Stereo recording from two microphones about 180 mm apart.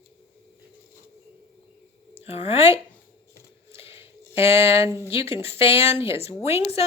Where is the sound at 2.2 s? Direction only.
35° left (ahead or behind).